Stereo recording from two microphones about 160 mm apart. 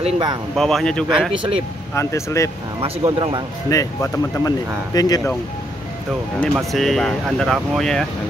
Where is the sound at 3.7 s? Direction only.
20° left (ahead or behind).